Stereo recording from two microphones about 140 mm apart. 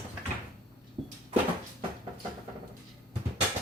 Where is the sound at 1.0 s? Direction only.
40° right (ahead or behind).